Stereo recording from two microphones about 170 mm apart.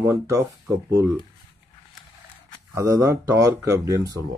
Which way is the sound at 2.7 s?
20° right (ahead or behind).